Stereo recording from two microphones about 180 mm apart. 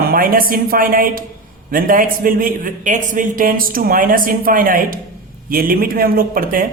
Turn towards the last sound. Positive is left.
turn(degrees=-50)  # may be behind; listen again after turning